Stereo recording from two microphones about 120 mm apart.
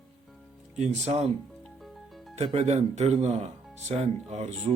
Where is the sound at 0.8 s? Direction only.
65° right (ahead or behind).